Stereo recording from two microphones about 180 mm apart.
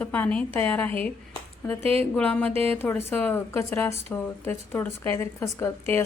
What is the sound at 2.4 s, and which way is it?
Speech, 30° right (ahead or behind).